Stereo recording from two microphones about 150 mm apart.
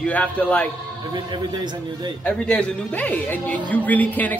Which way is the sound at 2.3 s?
5° left (ahead or behind).